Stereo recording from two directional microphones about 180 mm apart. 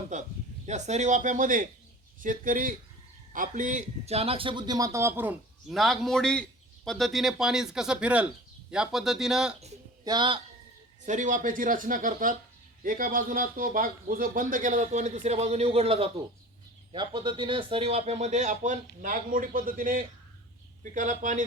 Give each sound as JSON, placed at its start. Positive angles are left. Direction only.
{"t": 0.1, "sound": "a man's voice", "side_deg": -40}
{"t": 5.6, "sound": "a man's voice", "side_deg": 0}
{"t": 10.0, "sound": "speech", "side_deg": -25}
{"t": 11.0, "sound": "speech", "side_deg": -45}